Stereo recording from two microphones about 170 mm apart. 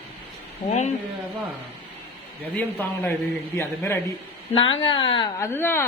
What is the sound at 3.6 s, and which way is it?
Speech, 15° left (ahead or behind).